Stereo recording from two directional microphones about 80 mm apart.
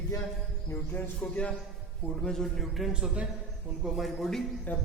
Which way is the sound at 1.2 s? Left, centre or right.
Centre.